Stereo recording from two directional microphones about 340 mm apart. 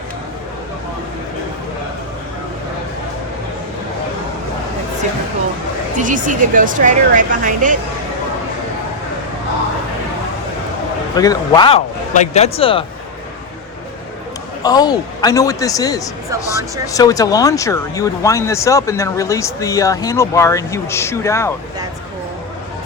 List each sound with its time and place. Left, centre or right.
6.0 s speech: right
11.2 s speech: centre
14.6 s speech: centre